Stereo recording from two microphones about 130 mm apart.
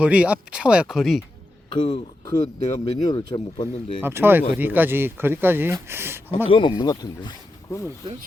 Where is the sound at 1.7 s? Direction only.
40° left (ahead or behind).